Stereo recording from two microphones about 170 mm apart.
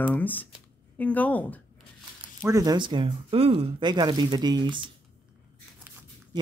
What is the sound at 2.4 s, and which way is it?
Speech, 20° right (ahead or behind).